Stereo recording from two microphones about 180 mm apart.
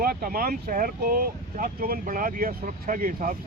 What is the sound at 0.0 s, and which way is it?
Speech, 55° right (ahead or behind).